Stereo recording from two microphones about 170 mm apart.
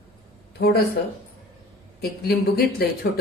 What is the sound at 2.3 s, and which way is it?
Speech, 65° left (ahead or behind).